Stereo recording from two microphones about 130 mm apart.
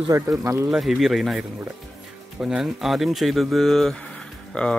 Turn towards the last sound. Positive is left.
turn(degrees=5)  # may be behind; listen again after turning